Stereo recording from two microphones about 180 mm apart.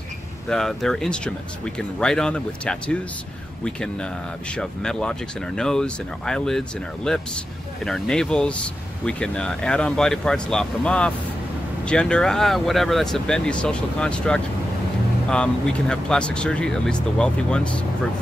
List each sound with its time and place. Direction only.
0.5 s speech: 5° left (ahead or behind)